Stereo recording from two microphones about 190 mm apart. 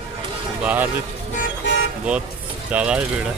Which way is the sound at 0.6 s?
10° right (ahead or behind).